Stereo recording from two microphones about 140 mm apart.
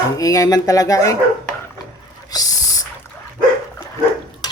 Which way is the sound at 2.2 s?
25° left (ahead or behind).